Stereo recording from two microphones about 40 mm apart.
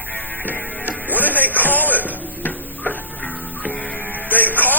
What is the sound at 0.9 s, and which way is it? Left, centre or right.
Music, left.